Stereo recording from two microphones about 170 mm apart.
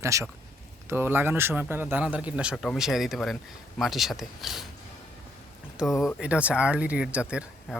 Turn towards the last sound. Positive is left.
turn(degrees=-5)  # may be behind; listen again after turning